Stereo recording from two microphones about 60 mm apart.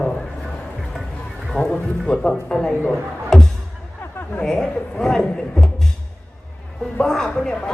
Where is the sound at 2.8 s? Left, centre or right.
Centre.